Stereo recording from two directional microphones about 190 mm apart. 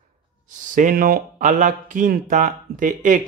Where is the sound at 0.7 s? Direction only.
45° right (ahead or behind).